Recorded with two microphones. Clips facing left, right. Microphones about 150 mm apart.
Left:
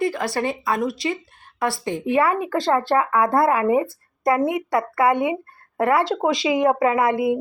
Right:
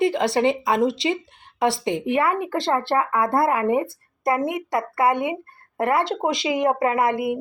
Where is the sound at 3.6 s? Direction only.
25° left (ahead or behind).